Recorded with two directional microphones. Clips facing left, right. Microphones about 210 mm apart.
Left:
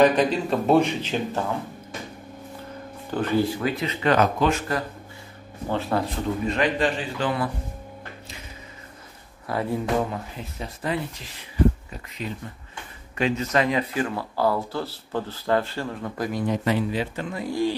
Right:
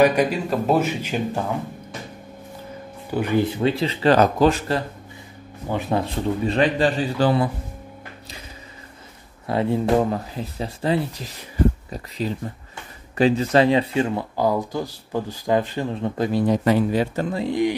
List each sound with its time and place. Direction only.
0.0 s a man's voice: 10° right (ahead or behind)
3.1 s speech: 15° right (ahead or behind); by 4.8 s 30° right (ahead or behind)
5.7 s speech: 15° right (ahead or behind)
6.4 s speech: 30° right (ahead or behind)
9.5 s speech: 25° right (ahead or behind)
10.1 s speech: 35° right (ahead or behind)
17.4 s speech: 20° right (ahead or behind)